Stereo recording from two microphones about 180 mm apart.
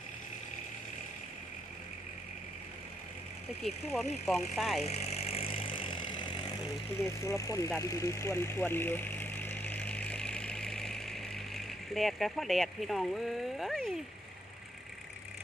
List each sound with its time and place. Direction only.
3.9 s speech: centre (ahead or behind)
4.8 s vehicle: 35° left (ahead or behind)
7.0 s speech: 15° left (ahead or behind)
7.8 s vehicle: 15° left (ahead or behind); by 14.0 s centre (ahead or behind)